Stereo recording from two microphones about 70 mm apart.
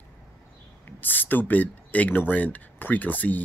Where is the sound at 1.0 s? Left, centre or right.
Left.